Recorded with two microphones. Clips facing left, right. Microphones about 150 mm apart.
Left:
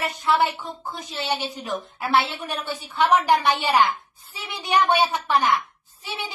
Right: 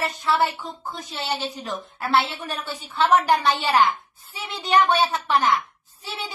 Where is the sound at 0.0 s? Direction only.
15° left (ahead or behind).